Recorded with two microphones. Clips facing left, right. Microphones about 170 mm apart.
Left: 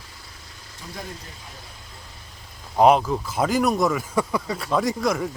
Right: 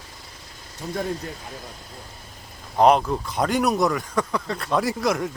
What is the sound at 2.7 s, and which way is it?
Speech, 5° left (ahead or behind).